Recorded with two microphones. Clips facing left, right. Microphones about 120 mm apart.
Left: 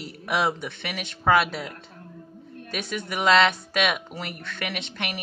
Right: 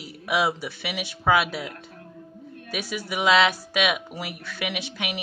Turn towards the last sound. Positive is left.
turn(degrees=-5)  # may be behind; listen again after turning